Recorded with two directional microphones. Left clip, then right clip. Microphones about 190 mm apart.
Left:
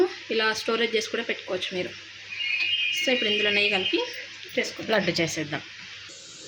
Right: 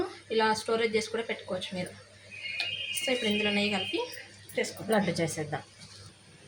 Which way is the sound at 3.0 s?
45° left (ahead or behind).